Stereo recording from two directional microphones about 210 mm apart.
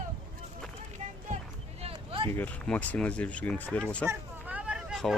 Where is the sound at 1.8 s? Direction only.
25° right (ahead or behind).